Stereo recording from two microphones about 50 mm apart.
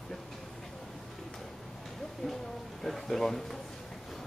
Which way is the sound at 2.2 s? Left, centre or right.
Centre.